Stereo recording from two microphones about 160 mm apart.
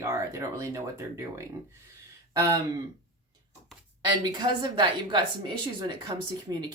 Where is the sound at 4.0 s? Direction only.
30° right (ahead or behind).